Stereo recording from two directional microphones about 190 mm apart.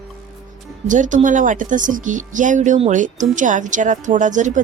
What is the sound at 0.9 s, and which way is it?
Speech, 40° right (ahead or behind).